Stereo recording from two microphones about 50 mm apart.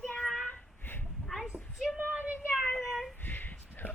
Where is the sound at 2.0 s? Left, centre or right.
Right.